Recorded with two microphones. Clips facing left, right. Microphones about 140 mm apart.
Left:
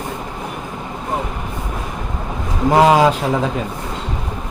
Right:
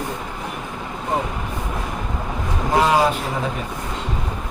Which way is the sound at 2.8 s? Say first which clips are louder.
Left 5 dB; 90° left.